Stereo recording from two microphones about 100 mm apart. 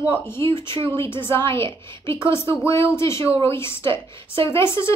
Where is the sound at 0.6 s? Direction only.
55° right (ahead or behind).